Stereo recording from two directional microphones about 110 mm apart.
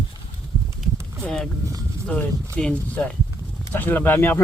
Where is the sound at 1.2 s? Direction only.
5° left (ahead or behind).